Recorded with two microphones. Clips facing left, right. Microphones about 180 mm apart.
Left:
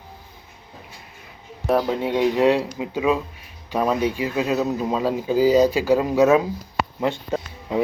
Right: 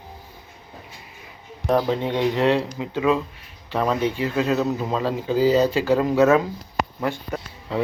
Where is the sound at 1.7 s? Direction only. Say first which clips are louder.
Even; 5° left (ahead or behind).